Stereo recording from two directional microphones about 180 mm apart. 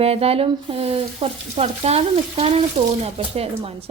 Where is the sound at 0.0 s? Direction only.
35° right (ahead or behind).